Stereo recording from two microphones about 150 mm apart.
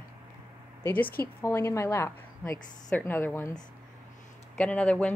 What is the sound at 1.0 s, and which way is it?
Speech, 85° left.